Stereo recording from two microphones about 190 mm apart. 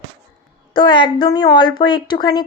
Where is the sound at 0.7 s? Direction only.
25° left (ahead or behind).